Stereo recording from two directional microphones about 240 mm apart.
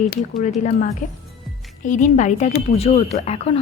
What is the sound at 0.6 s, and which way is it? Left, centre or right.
Speech, left.